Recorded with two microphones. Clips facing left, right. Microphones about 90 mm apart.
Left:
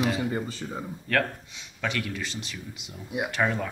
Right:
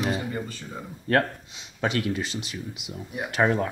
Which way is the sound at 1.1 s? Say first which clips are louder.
Right 4 dB; 30° right (ahead or behind).